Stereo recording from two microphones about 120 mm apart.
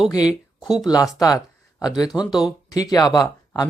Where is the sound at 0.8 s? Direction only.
35° left (ahead or behind).